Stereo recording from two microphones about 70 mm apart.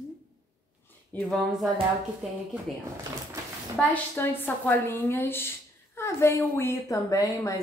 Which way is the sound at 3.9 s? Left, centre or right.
Left.